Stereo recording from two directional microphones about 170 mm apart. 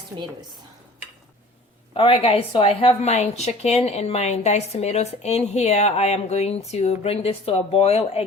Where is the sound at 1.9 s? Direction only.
30° left (ahead or behind).